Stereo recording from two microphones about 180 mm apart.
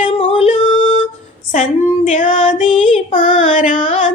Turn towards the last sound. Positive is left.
turn(degrees=45)  # may be behind; listen again after turning